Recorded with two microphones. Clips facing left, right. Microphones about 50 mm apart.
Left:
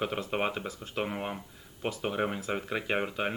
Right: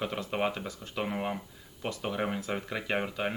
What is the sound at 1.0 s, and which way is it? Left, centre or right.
Speech, centre.